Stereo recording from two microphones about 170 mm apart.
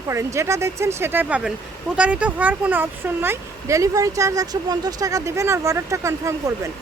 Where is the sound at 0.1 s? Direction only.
15° right (ahead or behind).